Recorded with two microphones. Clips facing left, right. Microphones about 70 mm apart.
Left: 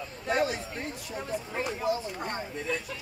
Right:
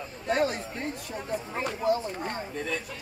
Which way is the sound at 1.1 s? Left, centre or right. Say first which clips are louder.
Right 1 dB; right.